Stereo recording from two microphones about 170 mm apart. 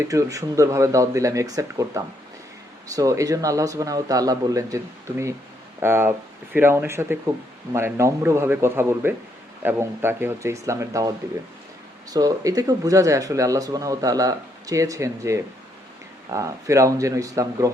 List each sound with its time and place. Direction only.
0.0 s a man's voice: 20° right (ahead or behind)
12.1 s speech: 20° right (ahead or behind)